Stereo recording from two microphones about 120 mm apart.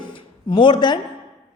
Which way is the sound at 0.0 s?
40° left (ahead or behind).